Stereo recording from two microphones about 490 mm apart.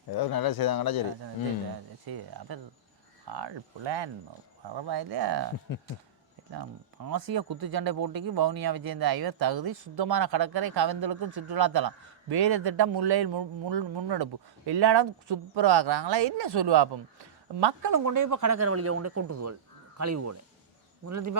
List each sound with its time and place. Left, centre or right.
0.1 s speech: left
2.0 s speech: right
5.7 s speech: left
6.5 s speech: right
18.0 s a woman's voice: right